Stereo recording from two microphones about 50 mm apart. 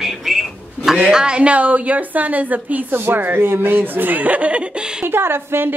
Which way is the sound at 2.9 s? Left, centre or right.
Right.